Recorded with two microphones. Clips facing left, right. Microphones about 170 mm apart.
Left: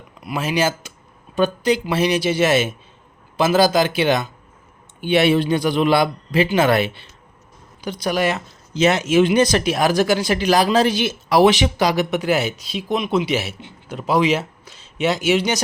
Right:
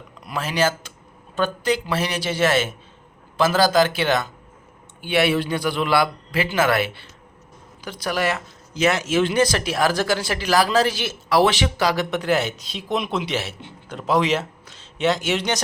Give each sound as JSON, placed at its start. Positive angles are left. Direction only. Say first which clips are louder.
{"t": 0.2, "sound": "speech", "louder": "left 2 dB", "side_deg": 10}